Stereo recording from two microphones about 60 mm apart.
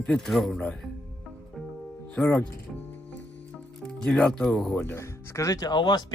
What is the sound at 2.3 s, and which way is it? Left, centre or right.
Music, left.